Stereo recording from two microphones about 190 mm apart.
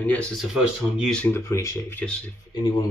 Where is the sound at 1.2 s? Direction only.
15° left (ahead or behind).